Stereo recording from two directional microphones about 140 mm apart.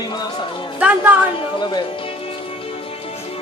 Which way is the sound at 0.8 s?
10° right (ahead or behind).